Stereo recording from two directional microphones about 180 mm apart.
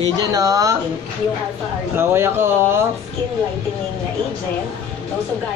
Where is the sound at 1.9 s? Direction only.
15° right (ahead or behind).